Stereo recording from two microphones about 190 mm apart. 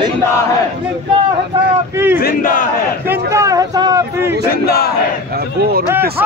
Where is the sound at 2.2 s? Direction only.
50° left (ahead or behind).